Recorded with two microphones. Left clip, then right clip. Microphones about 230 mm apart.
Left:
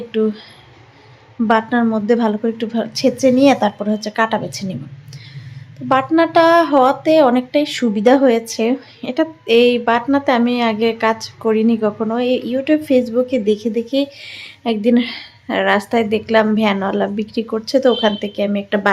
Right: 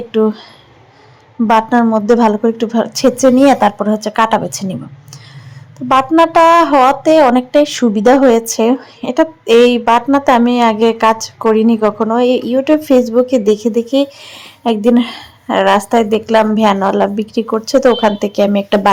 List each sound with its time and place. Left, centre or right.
0.1 s speech: centre
1.5 s speech: centre
5.9 s speech: centre